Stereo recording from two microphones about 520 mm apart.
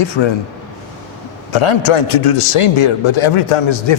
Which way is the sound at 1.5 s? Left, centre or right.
Left.